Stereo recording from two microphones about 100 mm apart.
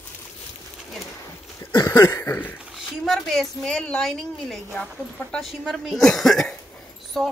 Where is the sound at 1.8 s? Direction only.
30° left (ahead or behind).